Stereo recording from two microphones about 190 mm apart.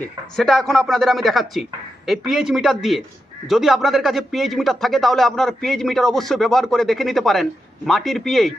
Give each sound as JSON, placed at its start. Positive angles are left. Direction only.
{"t": 0.0, "sound": "speech", "side_deg": 0}